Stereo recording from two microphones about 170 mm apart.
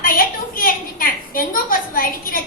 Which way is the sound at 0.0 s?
55° left (ahead or behind).